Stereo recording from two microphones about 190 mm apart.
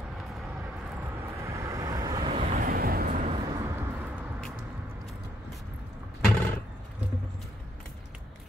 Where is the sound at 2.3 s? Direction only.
40° right (ahead or behind).